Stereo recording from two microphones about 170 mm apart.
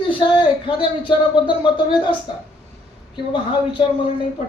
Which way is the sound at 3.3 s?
30° left (ahead or behind).